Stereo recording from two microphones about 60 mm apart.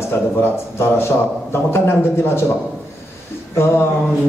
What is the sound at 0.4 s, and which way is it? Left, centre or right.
A man's voice, left.